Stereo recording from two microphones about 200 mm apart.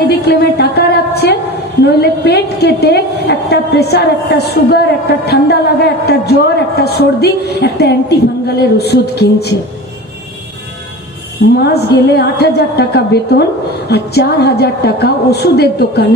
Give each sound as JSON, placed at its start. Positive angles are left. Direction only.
{"t": 0.2, "sound": "a sound", "side_deg": 55}
{"t": 1.9, "sound": "a woman's voice", "side_deg": 55}
{"t": 11.5, "sound": "a woman's voice", "side_deg": 55}